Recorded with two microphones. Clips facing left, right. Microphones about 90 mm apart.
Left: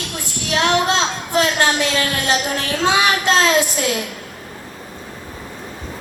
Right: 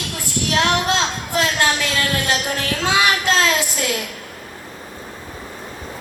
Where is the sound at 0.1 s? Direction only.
20° left (ahead or behind).